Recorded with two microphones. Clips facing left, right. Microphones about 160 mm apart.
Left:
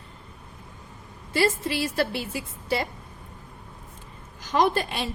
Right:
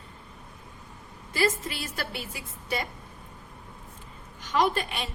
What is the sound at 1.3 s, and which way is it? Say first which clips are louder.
A woman's voice: left 3 dB; 30° left (ahead or behind).